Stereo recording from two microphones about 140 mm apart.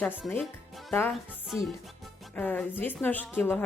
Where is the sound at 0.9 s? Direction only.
15° left (ahead or behind).